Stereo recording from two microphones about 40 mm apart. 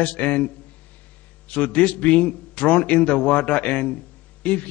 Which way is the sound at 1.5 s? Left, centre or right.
Left.